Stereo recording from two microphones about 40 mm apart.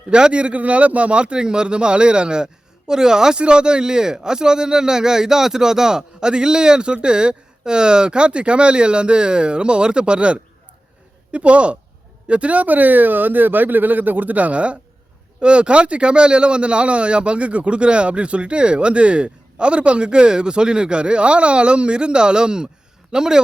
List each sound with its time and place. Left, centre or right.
0.1 s a man's voice: right